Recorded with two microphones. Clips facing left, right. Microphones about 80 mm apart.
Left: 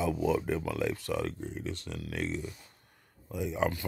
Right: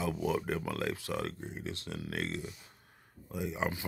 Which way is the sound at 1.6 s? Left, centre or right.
Right.